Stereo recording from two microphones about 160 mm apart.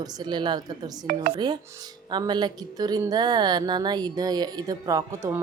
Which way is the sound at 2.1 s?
30° right (ahead or behind).